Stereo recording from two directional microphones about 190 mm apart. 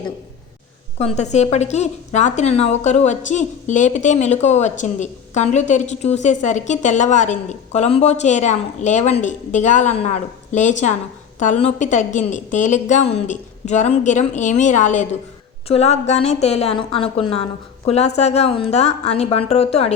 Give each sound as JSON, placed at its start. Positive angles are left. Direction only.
{"t": 0.9, "sound": "a woman's voice", "side_deg": 35}